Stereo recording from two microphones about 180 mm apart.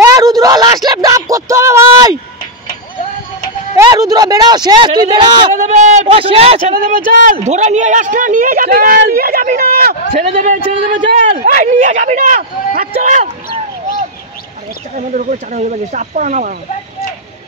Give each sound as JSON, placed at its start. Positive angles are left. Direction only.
{"t": 0.0, "sound": "a sound", "side_deg": -20}
{"t": 3.7, "sound": "a man's voice", "side_deg": -20}
{"t": 5.6, "sound": "a man's voice", "side_deg": -40}
{"t": 6.7, "sound": "speech", "side_deg": -45}
{"t": 15.0, "sound": "speech", "side_deg": -45}